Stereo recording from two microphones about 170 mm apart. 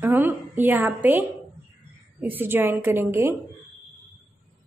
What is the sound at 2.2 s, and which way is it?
A woman's voice, 10° right (ahead or behind).